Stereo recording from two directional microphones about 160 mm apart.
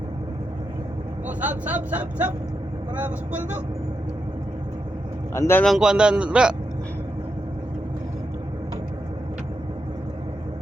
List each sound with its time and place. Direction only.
1.5 s speech: 10° right (ahead or behind)
5.3 s a man's voice: 15° left (ahead or behind)
5.6 s a man's voice: centre (ahead or behind)